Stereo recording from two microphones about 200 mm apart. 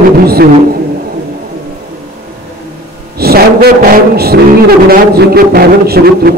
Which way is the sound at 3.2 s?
50° right (ahead or behind).